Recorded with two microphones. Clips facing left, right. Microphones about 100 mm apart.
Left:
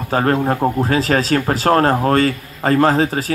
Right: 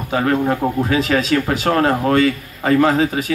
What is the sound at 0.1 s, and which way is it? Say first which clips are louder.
Speech: left 1 dB; 35° left (ahead or behind).